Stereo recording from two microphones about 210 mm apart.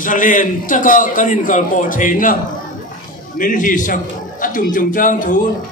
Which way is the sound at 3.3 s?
40° left (ahead or behind).